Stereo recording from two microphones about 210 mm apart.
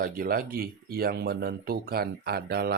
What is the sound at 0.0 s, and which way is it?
Speech, 45° right (ahead or behind).